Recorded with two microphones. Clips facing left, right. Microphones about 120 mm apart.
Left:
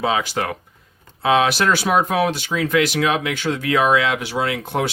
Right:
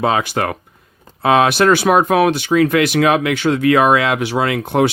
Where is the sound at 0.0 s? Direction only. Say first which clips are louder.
Right 4 dB; 55° right (ahead or behind).